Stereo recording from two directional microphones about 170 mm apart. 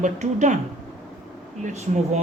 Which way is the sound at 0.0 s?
45° right (ahead or behind).